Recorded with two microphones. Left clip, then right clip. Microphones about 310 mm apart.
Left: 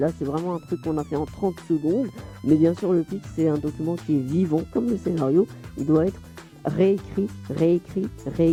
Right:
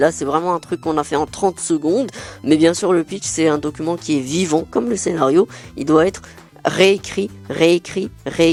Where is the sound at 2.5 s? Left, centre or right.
Centre.